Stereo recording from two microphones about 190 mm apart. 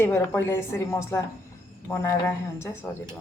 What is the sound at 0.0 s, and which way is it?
Speech, 15° left (ahead or behind).